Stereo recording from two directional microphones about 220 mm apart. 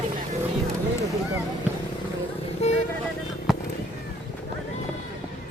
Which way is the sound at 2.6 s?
30° left (ahead or behind).